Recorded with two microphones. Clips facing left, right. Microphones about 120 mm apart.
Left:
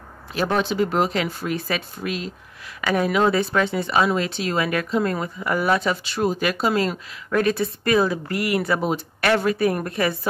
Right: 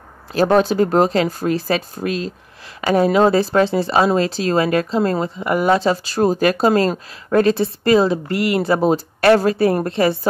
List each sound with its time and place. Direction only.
0.3 s speech: 40° right (ahead or behind)